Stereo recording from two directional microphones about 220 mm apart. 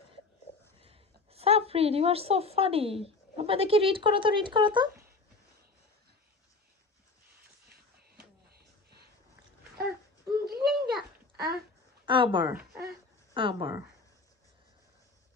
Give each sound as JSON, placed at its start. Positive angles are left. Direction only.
{"t": 0.8, "sound": "a woman's voice", "side_deg": -25}
{"t": 8.5, "sound": "a sound", "side_deg": -45}
{"t": 10.4, "sound": "babbling", "side_deg": -45}
{"t": 12.1, "sound": "speech", "side_deg": -20}